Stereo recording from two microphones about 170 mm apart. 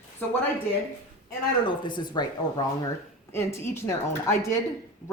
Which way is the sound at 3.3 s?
15° left (ahead or behind).